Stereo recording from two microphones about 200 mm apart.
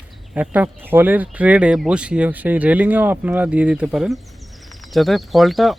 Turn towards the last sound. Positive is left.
turn(degrees=0)  # may be behind; listen again after turning